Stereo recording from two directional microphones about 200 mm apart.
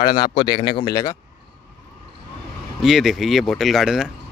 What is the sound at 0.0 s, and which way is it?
A man's voice, 20° left (ahead or behind).